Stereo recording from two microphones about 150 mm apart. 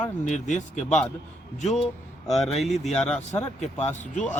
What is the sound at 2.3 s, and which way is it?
Speech, centre (ahead or behind).